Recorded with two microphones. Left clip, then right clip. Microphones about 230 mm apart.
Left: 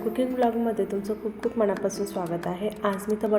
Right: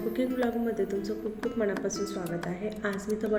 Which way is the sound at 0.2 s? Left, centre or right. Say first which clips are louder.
Left 6 dB; centre.